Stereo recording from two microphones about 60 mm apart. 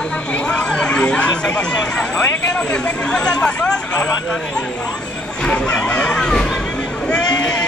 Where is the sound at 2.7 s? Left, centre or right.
Centre.